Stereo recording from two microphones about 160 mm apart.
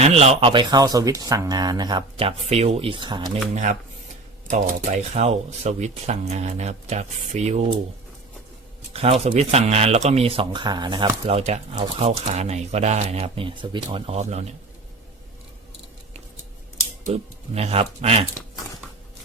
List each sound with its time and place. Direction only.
0.0 s speech: 40° right (ahead or behind)
3.5 s speech: 50° right (ahead or behind)
8.9 s speech: 40° right (ahead or behind)
11.3 s speech: 40° right (ahead or behind)
17.0 s speech: 40° right (ahead or behind)